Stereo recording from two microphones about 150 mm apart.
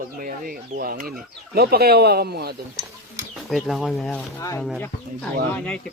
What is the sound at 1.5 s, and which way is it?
Speech, 90° right.